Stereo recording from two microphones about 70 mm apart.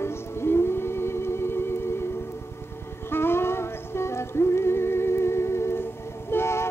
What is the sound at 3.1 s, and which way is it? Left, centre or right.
Music, left.